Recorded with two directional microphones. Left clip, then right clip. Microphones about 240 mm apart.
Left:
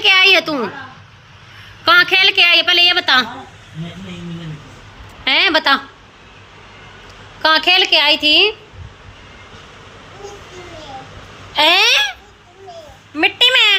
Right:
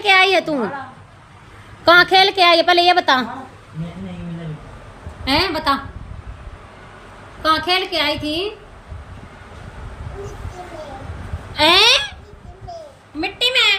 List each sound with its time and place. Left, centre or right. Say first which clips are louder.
0.0 s a woman's voice: left 3 dB; centre
1.8 s a woman's voice: even; right
5.2 s a woman's voice: left 5 dB; centre
7.4 s a woman's voice: left 5 dB; centre
11.5 s a sound: left 1 dB; centre
13.5 s speech: even; centre